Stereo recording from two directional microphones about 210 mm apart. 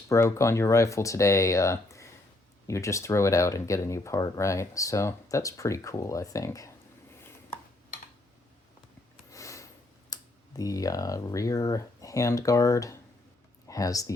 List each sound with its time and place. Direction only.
0.1 s speech: 15° left (ahead or behind)
9.3 s a sound: 15° left (ahead or behind)
10.1 s speech: 15° left (ahead or behind)